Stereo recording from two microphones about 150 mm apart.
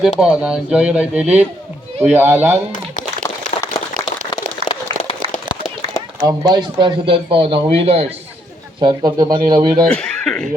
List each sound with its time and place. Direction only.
0.0 s speech: centre (ahead or behind)
3.5 s a sound: 55° left (ahead or behind)
5.5 s run: 25° left (ahead or behind)
6.2 s a man's voice: 25° right (ahead or behind)
8.8 s speech: 25° right (ahead or behind)
9.8 s speech: 5° left (ahead or behind)